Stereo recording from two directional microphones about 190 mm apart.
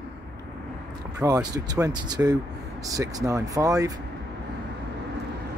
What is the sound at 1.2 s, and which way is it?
Speech, 20° right (ahead or behind).